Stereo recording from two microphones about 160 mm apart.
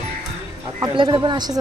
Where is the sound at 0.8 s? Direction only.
25° right (ahead or behind).